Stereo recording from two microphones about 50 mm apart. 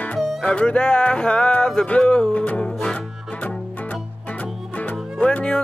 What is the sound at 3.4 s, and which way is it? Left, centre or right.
Music, left.